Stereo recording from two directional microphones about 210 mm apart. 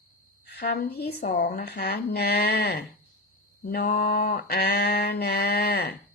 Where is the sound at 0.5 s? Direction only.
50° left (ahead or behind).